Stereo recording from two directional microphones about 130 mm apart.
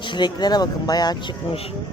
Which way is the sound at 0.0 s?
35° left (ahead or behind).